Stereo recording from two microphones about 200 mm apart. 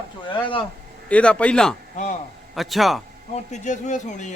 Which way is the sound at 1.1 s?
5° left (ahead or behind).